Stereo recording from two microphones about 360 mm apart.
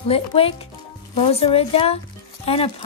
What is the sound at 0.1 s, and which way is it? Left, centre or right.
Speech, centre.